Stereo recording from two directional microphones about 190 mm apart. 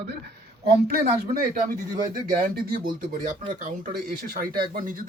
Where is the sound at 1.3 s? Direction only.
45° right (ahead or behind).